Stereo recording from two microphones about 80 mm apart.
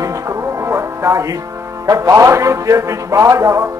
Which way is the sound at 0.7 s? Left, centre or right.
Right.